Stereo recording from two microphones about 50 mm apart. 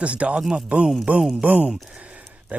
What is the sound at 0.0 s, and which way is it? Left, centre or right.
Speech, right.